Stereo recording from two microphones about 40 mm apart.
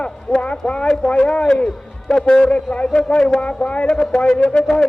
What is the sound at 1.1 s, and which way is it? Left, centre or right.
Speech, left.